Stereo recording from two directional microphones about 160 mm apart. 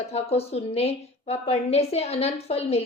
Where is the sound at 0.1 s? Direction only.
40° left (ahead or behind).